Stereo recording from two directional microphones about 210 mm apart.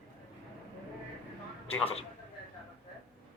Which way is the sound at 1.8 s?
30° left (ahead or behind).